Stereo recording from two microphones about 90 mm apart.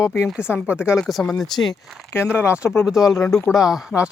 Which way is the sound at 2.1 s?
25° left (ahead or behind).